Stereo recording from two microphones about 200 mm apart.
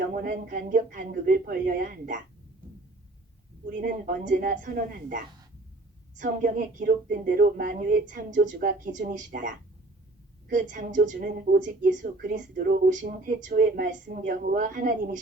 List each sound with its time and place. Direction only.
0.1 s speech: 40° right (ahead or behind)
3.7 s speech: 45° right (ahead or behind)
10.5 s a woman's voice: 40° right (ahead or behind)